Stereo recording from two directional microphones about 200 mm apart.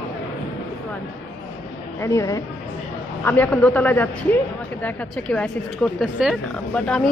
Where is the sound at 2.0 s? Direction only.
15° left (ahead or behind).